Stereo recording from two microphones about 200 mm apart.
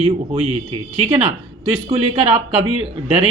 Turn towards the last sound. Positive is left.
turn(degrees=-30)  # may be behind; listen again after turning